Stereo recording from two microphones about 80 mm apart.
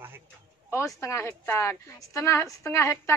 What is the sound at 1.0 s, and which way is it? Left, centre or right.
A woman's voice, left.